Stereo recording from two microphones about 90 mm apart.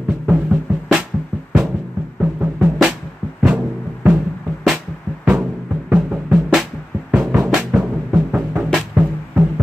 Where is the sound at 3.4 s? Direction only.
15° right (ahead or behind).